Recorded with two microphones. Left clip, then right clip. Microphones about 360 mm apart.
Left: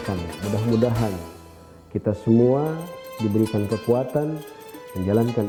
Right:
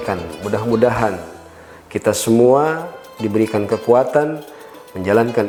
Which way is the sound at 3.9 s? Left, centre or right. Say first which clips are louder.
Right 9 dB; centre.